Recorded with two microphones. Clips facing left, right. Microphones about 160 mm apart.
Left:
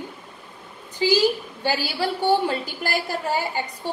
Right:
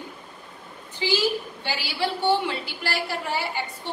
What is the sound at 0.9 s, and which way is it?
A woman's voice, 40° left (ahead or behind).